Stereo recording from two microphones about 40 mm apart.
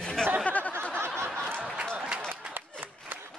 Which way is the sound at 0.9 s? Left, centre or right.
Right.